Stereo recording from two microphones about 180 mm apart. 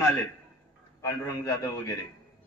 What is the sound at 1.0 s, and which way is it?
Speech, 15° left (ahead or behind).